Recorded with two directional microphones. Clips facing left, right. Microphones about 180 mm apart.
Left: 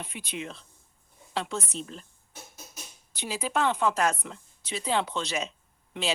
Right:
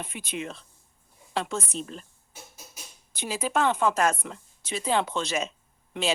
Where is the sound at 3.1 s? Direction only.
45° right (ahead or behind).